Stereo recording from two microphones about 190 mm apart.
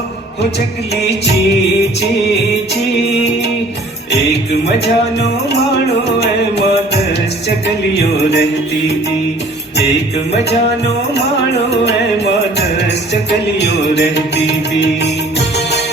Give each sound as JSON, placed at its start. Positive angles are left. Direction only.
{"t": 7.9, "sound": "music", "side_deg": 60}
{"t": 12.2, "sound": "music", "side_deg": 60}